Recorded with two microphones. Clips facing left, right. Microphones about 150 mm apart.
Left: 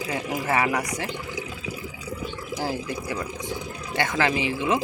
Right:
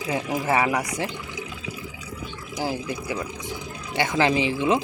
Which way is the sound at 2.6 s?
15° right (ahead or behind).